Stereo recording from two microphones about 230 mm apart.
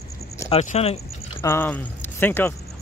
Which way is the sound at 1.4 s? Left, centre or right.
Centre.